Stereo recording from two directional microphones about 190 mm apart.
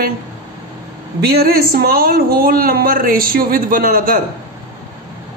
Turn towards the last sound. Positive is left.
turn(degrees=-50)  # may be behind; listen again after turning